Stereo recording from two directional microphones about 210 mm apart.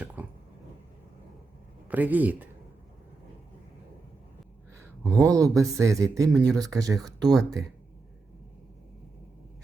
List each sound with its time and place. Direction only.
0.2 s a sound: 10° right (ahead or behind)
1.9 s speech: 10° right (ahead or behind)
5.1 s speech: 15° right (ahead or behind)